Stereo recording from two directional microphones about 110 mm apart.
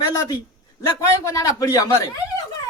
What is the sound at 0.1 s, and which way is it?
A man's voice, 30° left (ahead or behind).